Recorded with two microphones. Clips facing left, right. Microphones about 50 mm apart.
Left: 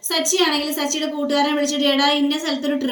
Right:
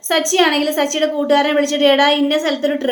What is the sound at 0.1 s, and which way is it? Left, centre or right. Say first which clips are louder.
A woman's voice: right 5 dB; right.